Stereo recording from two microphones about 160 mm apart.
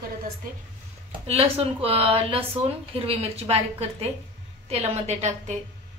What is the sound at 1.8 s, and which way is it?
A woman's voice, 35° right (ahead or behind).